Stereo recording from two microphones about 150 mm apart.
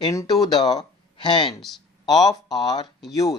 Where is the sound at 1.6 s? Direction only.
Centre (ahead or behind).